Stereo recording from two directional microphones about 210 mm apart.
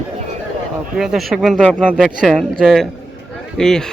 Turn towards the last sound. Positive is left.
turn(degrees=5)  # may be behind; listen again after turning